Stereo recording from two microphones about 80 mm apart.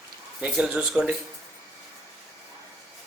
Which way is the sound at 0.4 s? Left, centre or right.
Centre.